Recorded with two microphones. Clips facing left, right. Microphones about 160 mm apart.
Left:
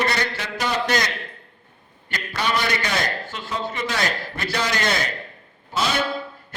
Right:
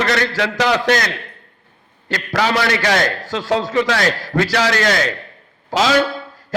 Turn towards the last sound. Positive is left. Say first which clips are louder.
# right 8 dB
turn(degrees=-90)